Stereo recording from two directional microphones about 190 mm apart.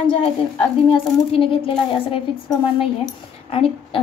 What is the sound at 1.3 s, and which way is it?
Speech, 30° left (ahead or behind).